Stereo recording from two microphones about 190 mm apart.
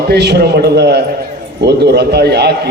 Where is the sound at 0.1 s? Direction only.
60° right (ahead or behind).